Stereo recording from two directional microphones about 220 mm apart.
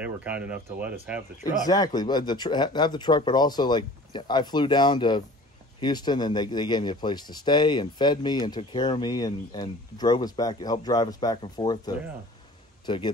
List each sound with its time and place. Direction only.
0.0 s speech: 5° right (ahead or behind)
1.7 s speech: 20° left (ahead or behind)